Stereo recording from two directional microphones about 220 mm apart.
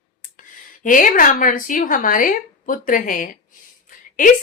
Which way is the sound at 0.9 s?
35° left (ahead or behind).